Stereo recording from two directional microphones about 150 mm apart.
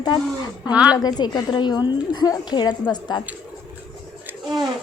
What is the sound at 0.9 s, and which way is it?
A woman's voice, 30° left (ahead or behind).